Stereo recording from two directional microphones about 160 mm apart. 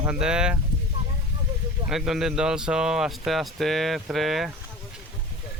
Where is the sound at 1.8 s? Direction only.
Centre (ahead or behind).